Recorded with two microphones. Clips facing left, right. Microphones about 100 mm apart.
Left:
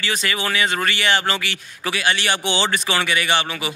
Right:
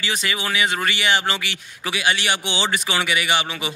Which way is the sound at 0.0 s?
15° right (ahead or behind).